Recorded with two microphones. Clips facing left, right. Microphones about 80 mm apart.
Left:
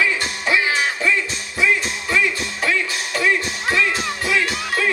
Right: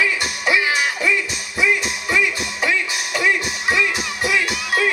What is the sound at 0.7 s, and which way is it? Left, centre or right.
Music, centre.